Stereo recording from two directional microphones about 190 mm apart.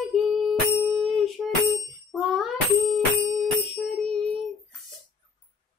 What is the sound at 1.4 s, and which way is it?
Music, centre (ahead or behind).